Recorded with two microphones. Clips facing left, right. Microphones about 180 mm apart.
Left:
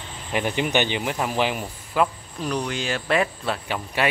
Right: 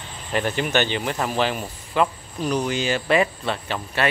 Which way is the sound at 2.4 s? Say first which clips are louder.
Right 3 dB; 5° right (ahead or behind).